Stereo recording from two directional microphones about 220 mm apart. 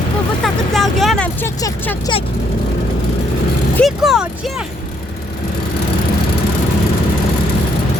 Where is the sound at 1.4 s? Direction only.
15° left (ahead or behind).